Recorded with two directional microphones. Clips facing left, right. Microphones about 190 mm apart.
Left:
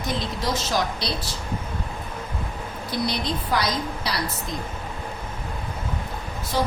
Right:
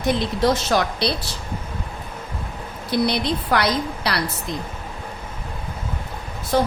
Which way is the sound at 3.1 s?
65° right (ahead or behind).